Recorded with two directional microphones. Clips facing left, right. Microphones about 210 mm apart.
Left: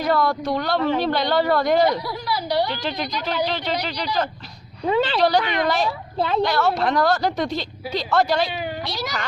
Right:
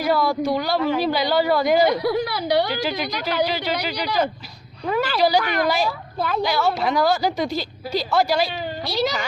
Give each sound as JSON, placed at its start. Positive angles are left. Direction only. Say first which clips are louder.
{"t": 0.0, "sound": "a woman's voice", "louder": "right 1 dB", "side_deg": -5}
{"t": 2.0, "sound": "a woman's voice", "louder": "right 5 dB", "side_deg": -60}
{"t": 2.8, "sound": "a woman's voice", "louder": "right 1 dB", "side_deg": -5}
{"t": 4.9, "sound": "speech", "louder": "left 1 dB", "side_deg": 25}
{"t": 6.4, "sound": "a woman's voice", "louder": "even", "side_deg": 0}